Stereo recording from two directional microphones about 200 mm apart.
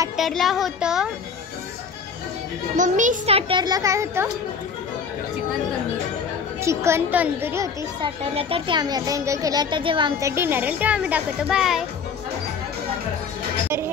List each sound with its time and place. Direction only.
0.2 s speech: centre (ahead or behind)
2.7 s speech: 40° right (ahead or behind); by 4.3 s 15° right (ahead or behind)
6.6 s a child's voice: 15° right (ahead or behind)
8.0 s speech: 30° right (ahead or behind)
10.3 s a child's voice: 10° right (ahead or behind)